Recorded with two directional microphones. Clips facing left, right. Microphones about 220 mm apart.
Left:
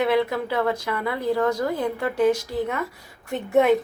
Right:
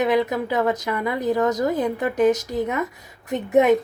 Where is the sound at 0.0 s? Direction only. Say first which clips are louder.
Right 1 dB; 15° right (ahead or behind).